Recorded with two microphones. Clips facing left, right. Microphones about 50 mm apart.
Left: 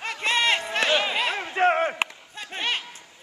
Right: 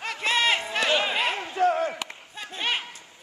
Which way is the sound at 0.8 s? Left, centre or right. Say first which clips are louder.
Even; left.